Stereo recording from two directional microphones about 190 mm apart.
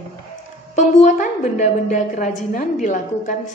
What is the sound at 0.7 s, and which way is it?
A woman's voice, 40° left (ahead or behind).